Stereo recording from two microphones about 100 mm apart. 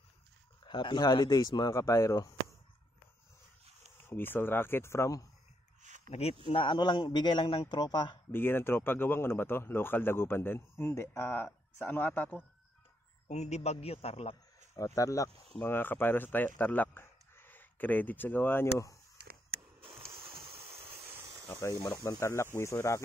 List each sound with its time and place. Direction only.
0.7 s a man's voice: 50° left (ahead or behind); by 2.3 s 30° left (ahead or behind)
4.0 s speech: 20° left (ahead or behind)
6.0 s a man's voice: 90° left; by 7.8 s 55° left (ahead or behind)
7.8 s a man's voice: 45° left (ahead or behind)
8.3 s speech: 20° left (ahead or behind)
13.5 s a man's voice: 90° left
14.7 s speech: 30° left (ahead or behind)
15.6 s speech: 20° left (ahead or behind)
20.2 s a sound: 60° right (ahead or behind)
21.5 s speech: 30° left (ahead or behind)